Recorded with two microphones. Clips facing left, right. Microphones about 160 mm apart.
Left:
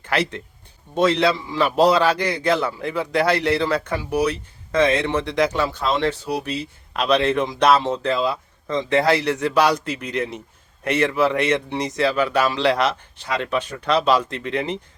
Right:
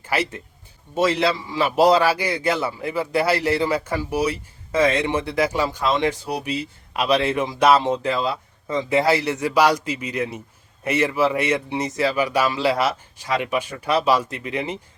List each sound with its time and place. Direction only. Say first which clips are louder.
0.0 s a man's voice: left 1 dB; 10° right (ahead or behind)